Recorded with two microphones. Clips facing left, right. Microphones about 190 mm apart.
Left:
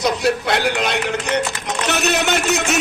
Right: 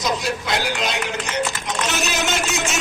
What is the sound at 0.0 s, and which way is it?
A man's voice, 60° left (ahead or behind).